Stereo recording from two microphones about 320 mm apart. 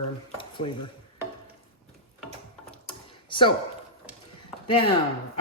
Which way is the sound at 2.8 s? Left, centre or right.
Centre.